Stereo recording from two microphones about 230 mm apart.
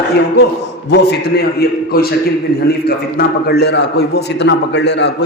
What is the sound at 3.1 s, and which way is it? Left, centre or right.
A man's voice, left.